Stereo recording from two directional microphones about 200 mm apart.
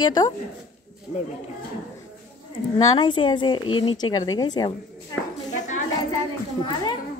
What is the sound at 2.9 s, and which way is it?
A woman's voice, 20° left (ahead or behind).